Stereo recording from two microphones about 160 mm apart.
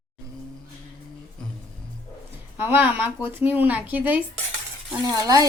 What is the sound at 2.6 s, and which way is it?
Speech, 15° right (ahead or behind).